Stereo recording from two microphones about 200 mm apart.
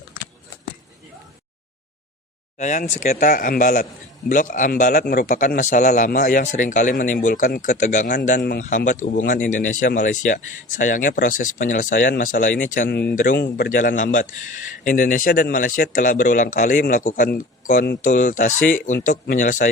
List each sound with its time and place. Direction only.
2.6 s a man's voice: 40° left (ahead or behind)